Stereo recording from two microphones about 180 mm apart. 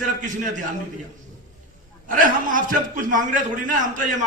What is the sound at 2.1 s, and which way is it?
A man's voice, 45° right (ahead or behind).